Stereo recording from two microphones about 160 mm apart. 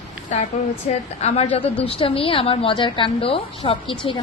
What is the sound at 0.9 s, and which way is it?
A woman's voice, 45° left (ahead or behind).